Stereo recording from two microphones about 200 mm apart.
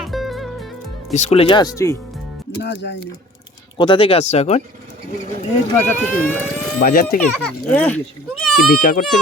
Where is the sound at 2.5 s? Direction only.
55° left (ahead or behind).